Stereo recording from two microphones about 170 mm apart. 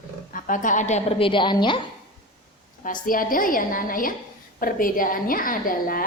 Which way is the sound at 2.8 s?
55° left (ahead or behind).